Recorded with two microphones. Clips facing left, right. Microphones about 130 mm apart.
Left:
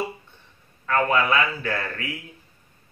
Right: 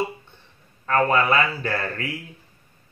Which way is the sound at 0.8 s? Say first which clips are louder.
Right 2 dB; 35° right (ahead or behind).